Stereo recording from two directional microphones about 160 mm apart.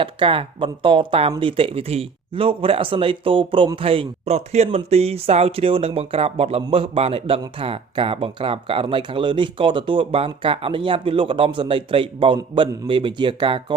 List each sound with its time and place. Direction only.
0.0 s a man's voice: 35° right (ahead or behind)